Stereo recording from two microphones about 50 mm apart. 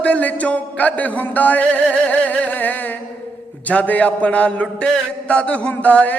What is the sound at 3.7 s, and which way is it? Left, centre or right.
A man's voice, left.